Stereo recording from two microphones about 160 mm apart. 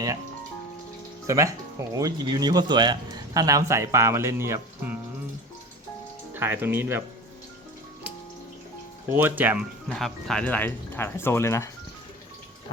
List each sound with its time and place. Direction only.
1.3 s speech: 20° right (ahead or behind)
6.3 s speech: 15° right (ahead or behind)
9.0 s speech: 10° right (ahead or behind)
9.9 s speech: 5° left (ahead or behind)